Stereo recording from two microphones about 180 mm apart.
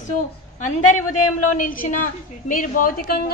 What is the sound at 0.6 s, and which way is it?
A woman's voice, 45° left (ahead or behind).